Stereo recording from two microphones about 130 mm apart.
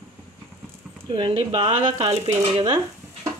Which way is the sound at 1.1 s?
40° right (ahead or behind).